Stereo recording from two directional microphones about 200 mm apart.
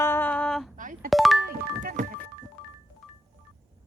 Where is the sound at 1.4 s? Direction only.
45° right (ahead or behind).